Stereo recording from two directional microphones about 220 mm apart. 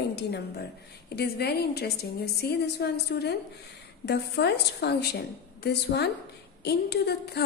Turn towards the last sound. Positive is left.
turn(degrees=45)  # may be behind; listen again after turning